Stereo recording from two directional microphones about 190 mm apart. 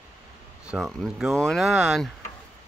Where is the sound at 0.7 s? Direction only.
Centre (ahead or behind).